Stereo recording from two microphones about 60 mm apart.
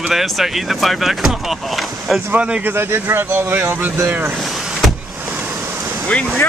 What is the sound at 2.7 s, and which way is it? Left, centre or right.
Speech, right.